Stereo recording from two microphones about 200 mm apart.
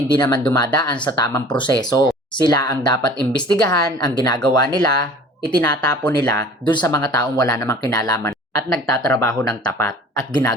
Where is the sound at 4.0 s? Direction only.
20° left (ahead or behind).